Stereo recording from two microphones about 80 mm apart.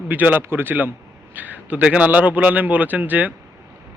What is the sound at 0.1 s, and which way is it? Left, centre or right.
A man's voice, right.